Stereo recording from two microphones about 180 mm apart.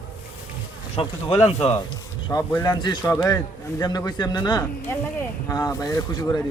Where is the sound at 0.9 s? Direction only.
30° left (ahead or behind).